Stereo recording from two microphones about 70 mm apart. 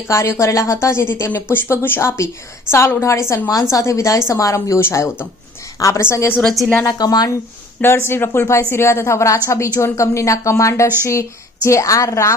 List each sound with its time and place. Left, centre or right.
0.1 s a woman's voice: left
3.5 s speech: left
4.8 s a woman's voice: left
6.5 s a woman's voice: centre
7.0 s speech: left
7.8 s a woman's voice: left